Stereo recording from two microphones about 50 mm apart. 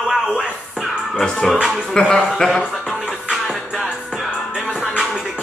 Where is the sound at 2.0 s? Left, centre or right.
Centre.